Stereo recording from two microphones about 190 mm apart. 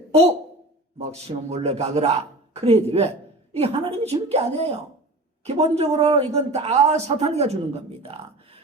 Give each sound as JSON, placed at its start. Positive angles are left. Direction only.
{"t": 0.9, "sound": "a man's voice", "side_deg": -35}